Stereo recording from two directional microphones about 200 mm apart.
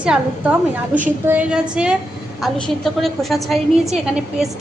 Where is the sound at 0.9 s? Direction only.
10° right (ahead or behind).